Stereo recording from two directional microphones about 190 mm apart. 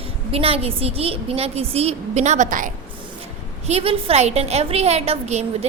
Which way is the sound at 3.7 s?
30° right (ahead or behind).